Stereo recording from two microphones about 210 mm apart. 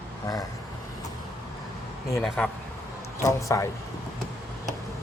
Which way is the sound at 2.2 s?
5° left (ahead or behind).